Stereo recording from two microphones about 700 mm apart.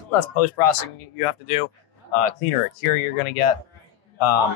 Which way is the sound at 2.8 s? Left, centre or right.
Left.